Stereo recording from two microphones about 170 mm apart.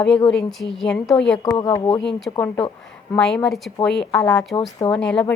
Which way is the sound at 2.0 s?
5° left (ahead or behind).